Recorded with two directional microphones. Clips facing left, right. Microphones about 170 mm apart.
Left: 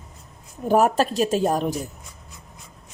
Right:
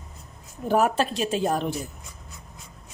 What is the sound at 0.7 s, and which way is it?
A woman's voice, 40° left (ahead or behind).